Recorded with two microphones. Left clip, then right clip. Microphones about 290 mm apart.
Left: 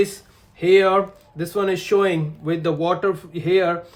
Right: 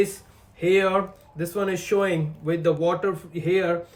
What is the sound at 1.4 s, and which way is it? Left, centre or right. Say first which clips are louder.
Speech: left 4 dB; centre.